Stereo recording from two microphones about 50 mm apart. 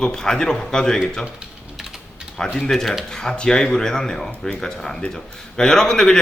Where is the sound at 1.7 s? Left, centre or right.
Centre.